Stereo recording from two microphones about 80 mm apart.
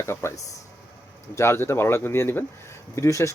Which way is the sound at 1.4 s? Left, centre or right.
Left.